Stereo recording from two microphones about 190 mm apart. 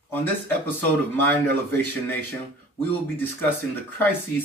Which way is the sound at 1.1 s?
10° left (ahead or behind).